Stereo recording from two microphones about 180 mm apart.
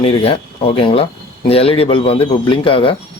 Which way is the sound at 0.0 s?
30° left (ahead or behind).